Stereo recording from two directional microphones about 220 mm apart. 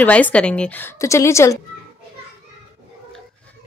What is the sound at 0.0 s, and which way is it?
A woman's voice, 5° left (ahead or behind).